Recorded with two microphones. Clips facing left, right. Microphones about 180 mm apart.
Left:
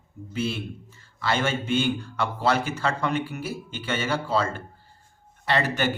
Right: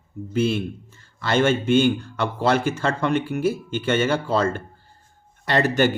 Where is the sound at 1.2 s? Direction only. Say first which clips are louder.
Right 6 dB; 45° right (ahead or behind).